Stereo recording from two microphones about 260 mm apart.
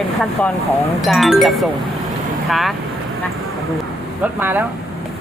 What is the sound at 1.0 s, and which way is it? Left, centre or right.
Speech, centre.